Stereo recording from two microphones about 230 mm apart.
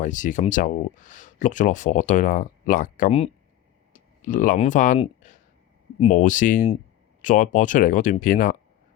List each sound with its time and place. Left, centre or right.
0.0 s speech: left